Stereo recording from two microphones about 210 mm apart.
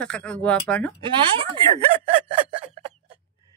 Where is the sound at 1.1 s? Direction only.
25° right (ahead or behind).